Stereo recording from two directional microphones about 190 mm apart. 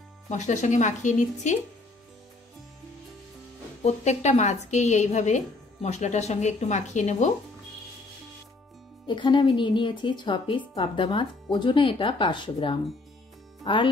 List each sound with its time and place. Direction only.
0.3 s a woman's voice: 40° left (ahead or behind)
3.8 s a woman's voice: 35° left (ahead or behind)
9.0 s speech: 25° left (ahead or behind)